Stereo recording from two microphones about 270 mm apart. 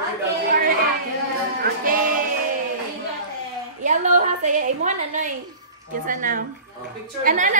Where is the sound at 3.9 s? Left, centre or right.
Right.